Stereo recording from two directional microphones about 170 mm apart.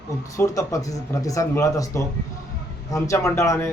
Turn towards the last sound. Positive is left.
turn(degrees=15)  # may be behind; listen again after turning